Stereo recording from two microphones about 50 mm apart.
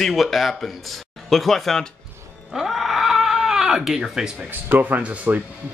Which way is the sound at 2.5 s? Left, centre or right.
Centre.